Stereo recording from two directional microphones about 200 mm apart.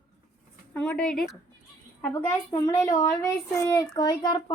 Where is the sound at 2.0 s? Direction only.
10° left (ahead or behind).